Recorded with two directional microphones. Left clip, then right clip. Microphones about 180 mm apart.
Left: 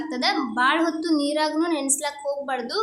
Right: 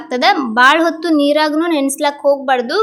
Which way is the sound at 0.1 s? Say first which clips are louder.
Right 12 dB; 30° right (ahead or behind).